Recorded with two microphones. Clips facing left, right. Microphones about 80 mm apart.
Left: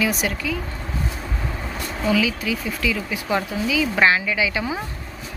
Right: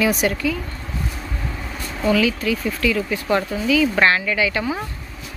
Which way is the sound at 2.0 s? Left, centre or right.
Centre.